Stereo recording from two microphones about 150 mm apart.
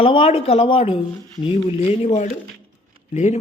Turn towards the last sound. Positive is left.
turn(degrees=50)  # may be behind; listen again after turning